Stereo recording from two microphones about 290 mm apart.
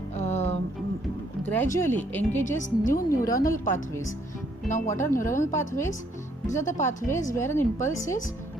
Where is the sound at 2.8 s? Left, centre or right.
Left.